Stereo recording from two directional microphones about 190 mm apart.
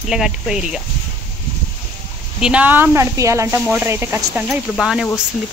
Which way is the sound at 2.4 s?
5° right (ahead or behind).